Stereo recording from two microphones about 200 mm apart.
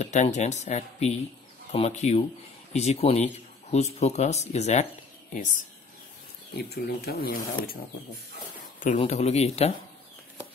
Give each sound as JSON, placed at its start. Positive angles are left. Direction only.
{"t": 0.0, "sound": "speech", "side_deg": 35}
{"t": 6.5, "sound": "speech", "side_deg": 50}
{"t": 8.7, "sound": "speech", "side_deg": 35}